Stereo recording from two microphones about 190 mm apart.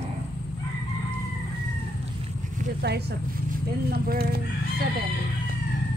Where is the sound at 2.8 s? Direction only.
60° right (ahead or behind).